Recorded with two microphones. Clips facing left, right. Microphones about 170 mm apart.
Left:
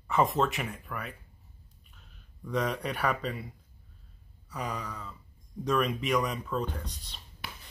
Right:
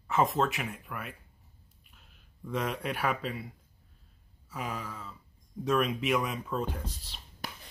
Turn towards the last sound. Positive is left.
turn(degrees=-40)  # may be behind; listen again after turning